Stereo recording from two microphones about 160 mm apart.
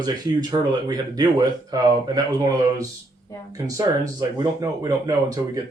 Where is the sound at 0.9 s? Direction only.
25° right (ahead or behind).